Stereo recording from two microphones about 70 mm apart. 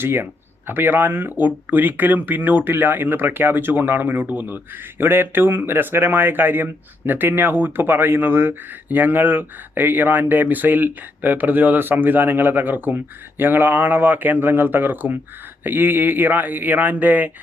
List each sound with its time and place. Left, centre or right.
0.0 s speech: right